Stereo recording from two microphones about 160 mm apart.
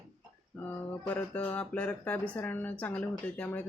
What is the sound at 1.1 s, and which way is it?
Speech, 10° left (ahead or behind).